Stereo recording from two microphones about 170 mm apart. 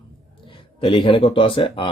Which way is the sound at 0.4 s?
30° left (ahead or behind).